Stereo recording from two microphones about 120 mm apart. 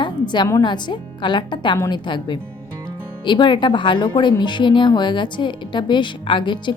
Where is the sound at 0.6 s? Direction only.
40° left (ahead or behind).